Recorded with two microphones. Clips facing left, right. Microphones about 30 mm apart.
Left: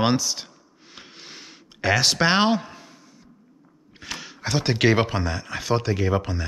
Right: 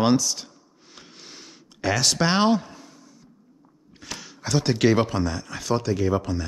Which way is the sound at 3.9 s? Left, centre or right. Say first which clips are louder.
Left 3 dB; centre.